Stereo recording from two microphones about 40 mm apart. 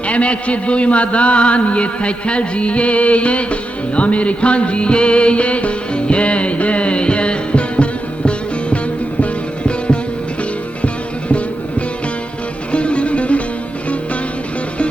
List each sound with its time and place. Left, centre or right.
0.1 s a man's voice: left
9.2 s music: left
12.7 s music: left